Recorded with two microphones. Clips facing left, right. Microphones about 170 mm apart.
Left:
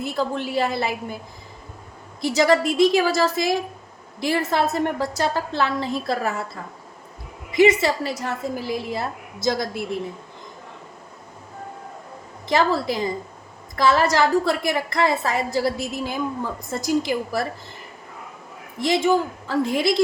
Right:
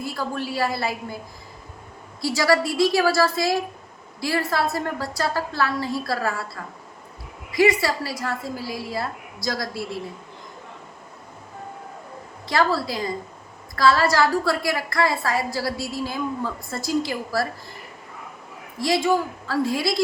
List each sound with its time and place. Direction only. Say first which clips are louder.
0.0 s a woman's voice: left 3 dB; 25° left (ahead or behind)
2.2 s a woman's voice: left 2 dB; 20° left (ahead or behind)
12.5 s a woman's voice: left 2 dB; 20° left (ahead or behind)
18.8 s a woman's voice: left 2 dB; 20° left (ahead or behind)